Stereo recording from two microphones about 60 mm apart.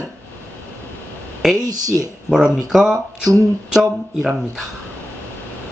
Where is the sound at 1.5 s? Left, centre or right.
Right.